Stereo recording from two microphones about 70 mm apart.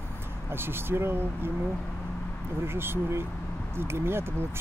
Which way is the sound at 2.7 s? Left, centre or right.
Right.